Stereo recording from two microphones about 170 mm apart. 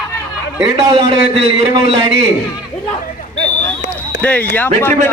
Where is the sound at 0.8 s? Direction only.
30° right (ahead or behind).